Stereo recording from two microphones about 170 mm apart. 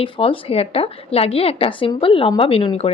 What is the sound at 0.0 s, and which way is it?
A woman's voice, 35° left (ahead or behind).